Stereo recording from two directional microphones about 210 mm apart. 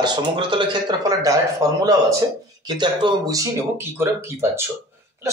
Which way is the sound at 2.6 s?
20° right (ahead or behind).